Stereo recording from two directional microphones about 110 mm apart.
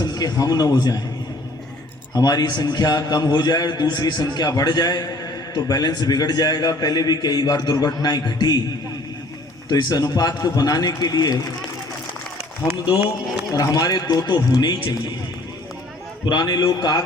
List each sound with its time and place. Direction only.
0.0 s speech: 40° left (ahead or behind)
2.1 s a man's voice: 35° left (ahead or behind)
9.6 s a man's voice: 40° left (ahead or behind)
13.5 s a man's voice: 35° left (ahead or behind)
16.2 s a man's voice: 40° left (ahead or behind)